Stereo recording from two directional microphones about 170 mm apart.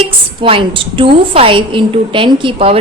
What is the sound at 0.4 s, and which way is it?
A woman's voice, 30° right (ahead or behind).